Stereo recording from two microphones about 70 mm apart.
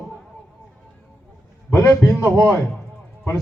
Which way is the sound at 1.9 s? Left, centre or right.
Left.